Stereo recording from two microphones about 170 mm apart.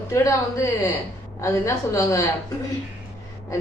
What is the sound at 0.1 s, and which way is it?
A woman's voice, 15° left (ahead or behind).